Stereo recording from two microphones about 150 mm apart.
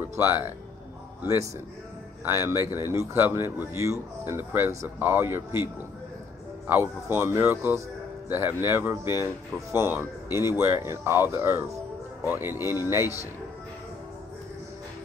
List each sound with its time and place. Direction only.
0.2 s speech: 15° right (ahead or behind)
2.2 s speech: 15° right (ahead or behind)
6.7 s speech: 15° right (ahead or behind)